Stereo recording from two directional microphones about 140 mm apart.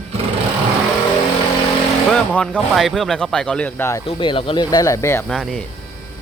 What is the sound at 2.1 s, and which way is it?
Speech, 5° left (ahead or behind).